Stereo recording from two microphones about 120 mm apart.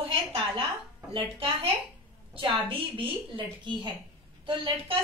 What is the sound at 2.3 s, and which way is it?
A woman's voice, 45° right (ahead or behind).